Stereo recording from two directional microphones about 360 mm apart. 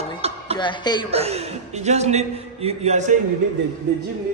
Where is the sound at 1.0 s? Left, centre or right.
Centre.